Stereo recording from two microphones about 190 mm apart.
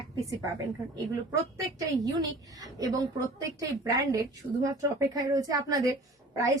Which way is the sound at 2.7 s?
20° right (ahead or behind).